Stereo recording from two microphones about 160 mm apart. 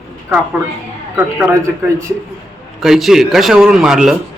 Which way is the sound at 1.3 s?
15° right (ahead or behind).